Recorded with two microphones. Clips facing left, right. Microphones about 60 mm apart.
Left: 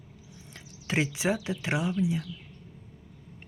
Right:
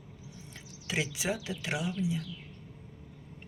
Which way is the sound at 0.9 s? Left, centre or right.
Left.